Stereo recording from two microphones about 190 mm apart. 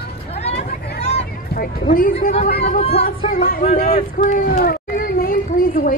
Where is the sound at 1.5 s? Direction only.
55° left (ahead or behind).